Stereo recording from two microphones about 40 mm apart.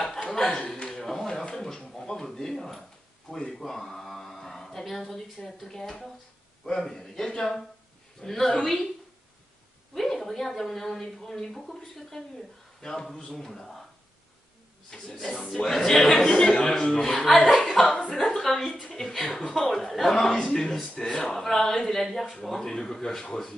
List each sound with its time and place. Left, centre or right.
0.3 s speech: centre
0.8 s a sound: centre
5.6 s a man's voice: centre
9.9 s a man's voice: centre
14.9 s a man's voice: centre
17.6 s chuckle: centre
18.1 s a sound: centre
18.9 s a man's voice: centre
20.3 s a man's voice: centre